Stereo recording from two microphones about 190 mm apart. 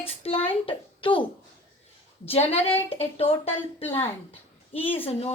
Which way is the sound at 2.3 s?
30° left (ahead or behind).